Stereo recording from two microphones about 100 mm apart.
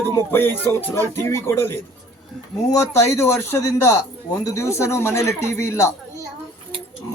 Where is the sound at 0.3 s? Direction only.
20° left (ahead or behind).